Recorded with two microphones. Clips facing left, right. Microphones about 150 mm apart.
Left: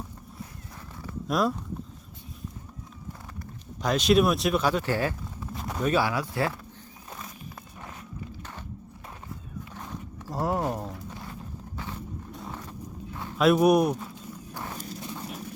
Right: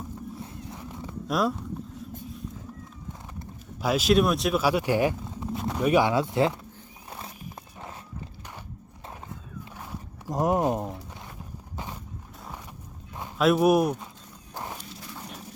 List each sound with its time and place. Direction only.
0.7 s a sound: 20° right (ahead or behind)
1.3 s speech: centre (ahead or behind)
3.8 s speech: 5° right (ahead or behind)
5.5 s pigeon: 5° right (ahead or behind)
5.9 s speech: 20° right (ahead or behind)
9.7 s a sound: 15° right (ahead or behind)
13.4 s speech: centre (ahead or behind)
14.5 s walk: 20° right (ahead or behind)